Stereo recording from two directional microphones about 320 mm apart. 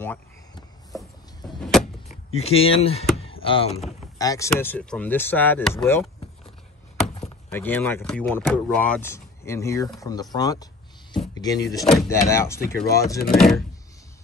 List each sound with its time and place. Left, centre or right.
0.0 s a sound: centre
2.3 s speech: centre
7.2 s speech: centre
10.3 s a sound: centre
11.7 s speech: centre
12.5 s speech: left
13.4 s speech: centre